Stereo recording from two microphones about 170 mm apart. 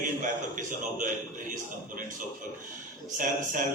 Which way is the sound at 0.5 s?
50° right (ahead or behind).